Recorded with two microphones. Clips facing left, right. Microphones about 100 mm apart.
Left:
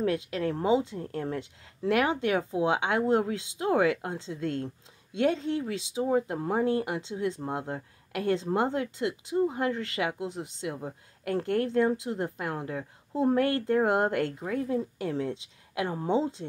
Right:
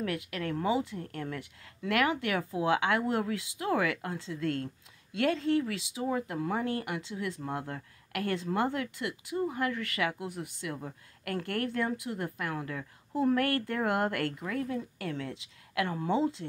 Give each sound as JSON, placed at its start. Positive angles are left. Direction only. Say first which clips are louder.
{"t": 0.0, "sound": "speech", "louder": "left 6 dB", "side_deg": 25}